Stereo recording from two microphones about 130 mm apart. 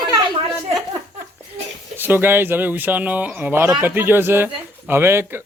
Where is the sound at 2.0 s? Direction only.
15° right (ahead or behind).